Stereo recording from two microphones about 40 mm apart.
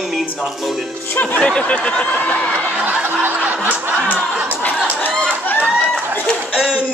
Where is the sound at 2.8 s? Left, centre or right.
Right.